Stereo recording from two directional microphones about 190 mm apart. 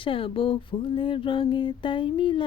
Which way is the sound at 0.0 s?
30° left (ahead or behind).